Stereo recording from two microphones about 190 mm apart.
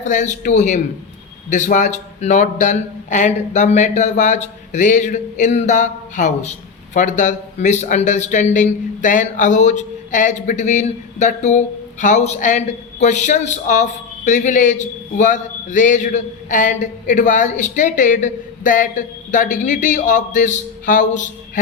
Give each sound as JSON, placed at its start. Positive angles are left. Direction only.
{"t": 0.0, "sound": "speech", "side_deg": 40}